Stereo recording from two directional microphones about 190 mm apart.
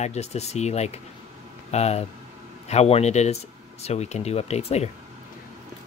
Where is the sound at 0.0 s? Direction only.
35° left (ahead or behind).